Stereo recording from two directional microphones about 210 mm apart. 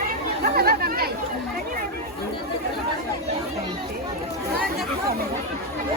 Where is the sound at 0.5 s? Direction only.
45° right (ahead or behind).